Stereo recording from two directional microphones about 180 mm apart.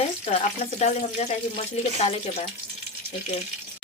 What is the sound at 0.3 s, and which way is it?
Speech, 40° left (ahead or behind).